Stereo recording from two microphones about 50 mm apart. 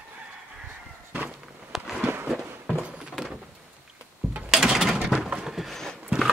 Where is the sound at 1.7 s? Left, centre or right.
Centre.